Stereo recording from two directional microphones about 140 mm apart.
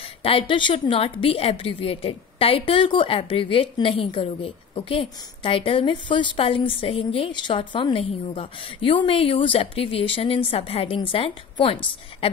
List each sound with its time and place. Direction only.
0.2 s a woman's voice: 40° left (ahead or behind)